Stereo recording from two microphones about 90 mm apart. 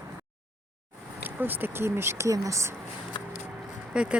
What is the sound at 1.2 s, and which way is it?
Speech, 20° right (ahead or behind).